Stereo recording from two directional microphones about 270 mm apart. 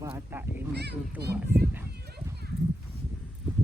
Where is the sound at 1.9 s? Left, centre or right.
Right.